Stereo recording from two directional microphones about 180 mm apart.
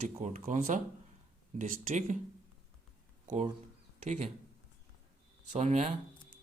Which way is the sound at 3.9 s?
40° right (ahead or behind).